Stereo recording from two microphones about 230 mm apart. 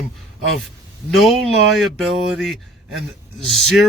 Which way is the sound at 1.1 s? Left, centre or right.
Centre.